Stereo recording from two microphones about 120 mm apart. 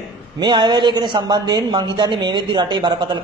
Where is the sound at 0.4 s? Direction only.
35° right (ahead or behind).